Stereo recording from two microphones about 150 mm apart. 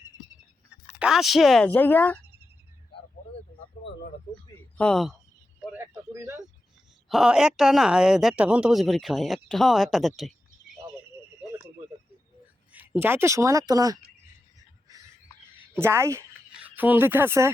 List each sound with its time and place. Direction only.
0.7 s speech: 5° right (ahead or behind); by 2.1 s 10° left (ahead or behind)
4.8 s speech: 5° left (ahead or behind)
5.7 s a sound: 15° right (ahead or behind)
7.1 s speech: 5° right (ahead or behind)
12.7 s speech: 10° right (ahead or behind)
15.7 s speech: 15° right (ahead or behind)